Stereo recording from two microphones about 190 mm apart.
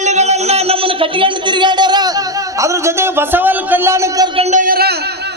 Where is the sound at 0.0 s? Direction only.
35° right (ahead or behind); by 4.3 s 15° right (ahead or behind).